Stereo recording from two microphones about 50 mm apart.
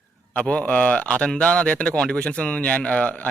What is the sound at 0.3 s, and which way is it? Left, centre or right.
Speech, left.